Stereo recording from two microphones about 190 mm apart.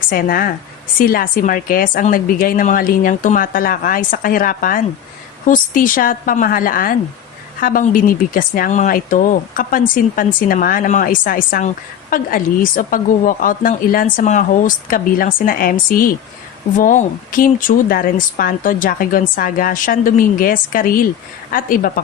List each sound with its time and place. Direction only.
0.1 s speech: 50° left (ahead or behind)